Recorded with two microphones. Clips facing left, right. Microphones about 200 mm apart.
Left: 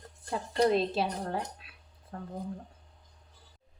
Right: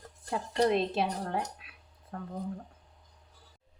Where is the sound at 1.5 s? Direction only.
30° left (ahead or behind).